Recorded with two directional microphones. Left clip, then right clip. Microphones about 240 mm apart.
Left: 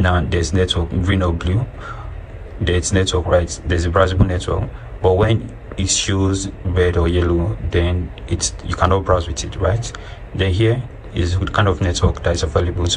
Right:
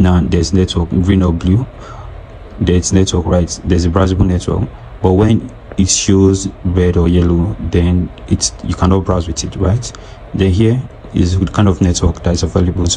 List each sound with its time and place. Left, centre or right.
0.0 s speech: right
2.6 s speech: right